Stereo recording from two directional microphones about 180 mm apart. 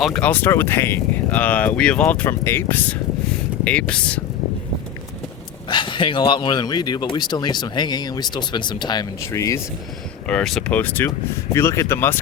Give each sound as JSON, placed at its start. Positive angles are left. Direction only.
{"t": 0.0, "sound": "speech", "side_deg": 5}
{"t": 5.6, "sound": "speech", "side_deg": 25}
{"t": 10.2, "sound": "speech", "side_deg": 5}